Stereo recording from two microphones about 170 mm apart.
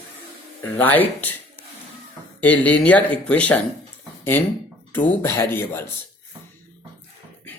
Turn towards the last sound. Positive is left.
turn(degrees=15)  # may be behind; listen again after turning